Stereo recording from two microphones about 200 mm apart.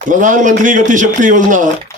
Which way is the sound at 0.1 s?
40° right (ahead or behind).